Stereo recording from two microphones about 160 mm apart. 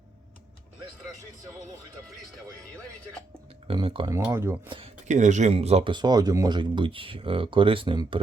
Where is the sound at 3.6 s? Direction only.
35° right (ahead or behind).